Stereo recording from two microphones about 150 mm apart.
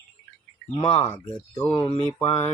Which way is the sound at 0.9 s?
45° left (ahead or behind).